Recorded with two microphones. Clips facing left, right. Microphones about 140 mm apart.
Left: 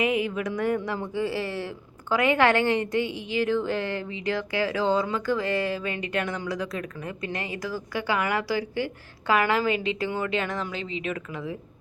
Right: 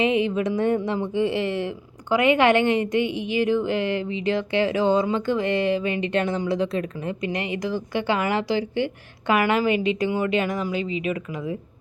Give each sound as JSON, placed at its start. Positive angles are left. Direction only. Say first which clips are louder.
{"t": 0.0, "sound": "a woman's voice", "louder": "right 4 dB", "side_deg": -25}